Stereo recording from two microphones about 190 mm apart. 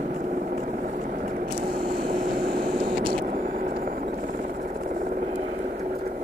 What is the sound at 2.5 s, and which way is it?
Vehicle, 45° right (ahead or behind).